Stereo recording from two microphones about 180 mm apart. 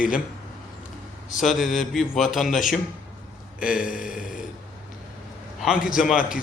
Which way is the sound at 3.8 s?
50° left (ahead or behind).